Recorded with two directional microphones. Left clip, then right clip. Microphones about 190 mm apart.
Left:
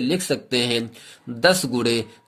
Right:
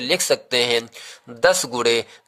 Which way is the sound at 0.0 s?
35° right (ahead or behind).